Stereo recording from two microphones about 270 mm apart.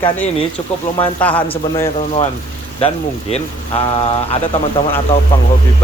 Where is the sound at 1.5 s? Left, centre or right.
Centre.